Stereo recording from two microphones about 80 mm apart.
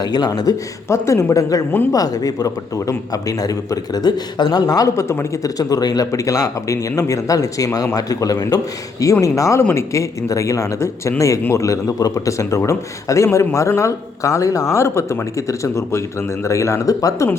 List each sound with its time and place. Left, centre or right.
0.0 s speech: left
0.9 s a man's voice: left
5.0 s a man's voice: left
6.1 s a man's voice: left